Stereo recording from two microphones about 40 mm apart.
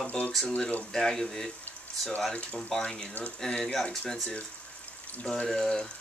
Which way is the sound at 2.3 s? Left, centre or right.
Left.